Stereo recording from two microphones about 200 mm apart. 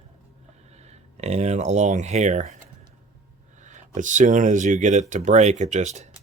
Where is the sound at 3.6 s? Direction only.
35° right (ahead or behind).